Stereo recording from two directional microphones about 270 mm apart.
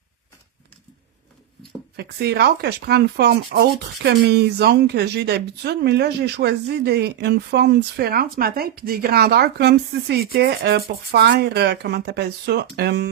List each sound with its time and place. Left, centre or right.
2.0 s speech: right